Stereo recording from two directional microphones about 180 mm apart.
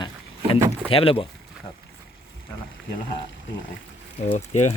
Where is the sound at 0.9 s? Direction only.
30° left (ahead or behind).